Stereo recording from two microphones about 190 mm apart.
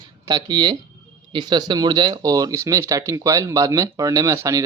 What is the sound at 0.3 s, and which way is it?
Speech, 20° right (ahead or behind).